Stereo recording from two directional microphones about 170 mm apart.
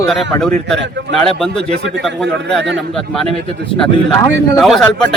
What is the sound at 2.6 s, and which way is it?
Speech, 90° right.